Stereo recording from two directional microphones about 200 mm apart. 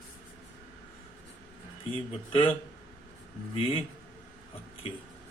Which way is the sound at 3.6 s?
30° left (ahead or behind).